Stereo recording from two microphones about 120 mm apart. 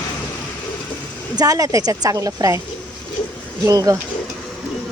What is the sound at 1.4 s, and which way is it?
A woman's voice, 30° right (ahead or behind).